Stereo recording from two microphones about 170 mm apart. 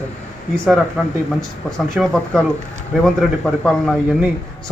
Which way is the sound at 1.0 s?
Centre (ahead or behind).